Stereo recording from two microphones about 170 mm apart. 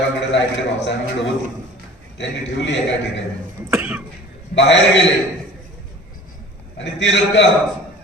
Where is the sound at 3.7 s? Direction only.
10° right (ahead or behind).